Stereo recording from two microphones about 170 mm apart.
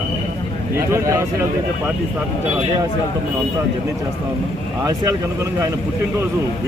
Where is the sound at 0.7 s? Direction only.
15° right (ahead or behind).